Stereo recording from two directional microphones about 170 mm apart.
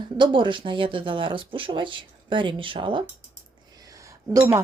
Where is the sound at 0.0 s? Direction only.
30° right (ahead or behind).